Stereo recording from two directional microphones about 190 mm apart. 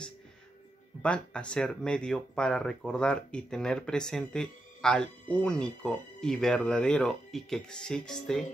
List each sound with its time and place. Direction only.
1.0 s speech: 5° left (ahead or behind)